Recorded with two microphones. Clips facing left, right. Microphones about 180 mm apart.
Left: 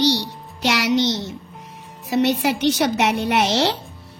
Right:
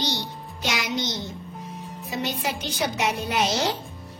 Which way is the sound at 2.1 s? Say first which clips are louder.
Left 10 dB; 75° left (ahead or behind).